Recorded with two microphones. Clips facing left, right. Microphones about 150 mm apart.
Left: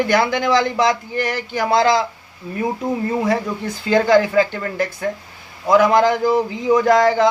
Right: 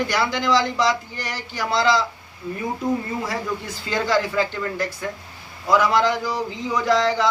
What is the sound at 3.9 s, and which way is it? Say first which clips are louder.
A man's voice: left 8 dB; 55° left (ahead or behind).